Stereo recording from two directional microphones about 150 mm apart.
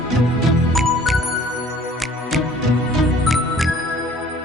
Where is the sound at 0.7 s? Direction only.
Centre (ahead or behind).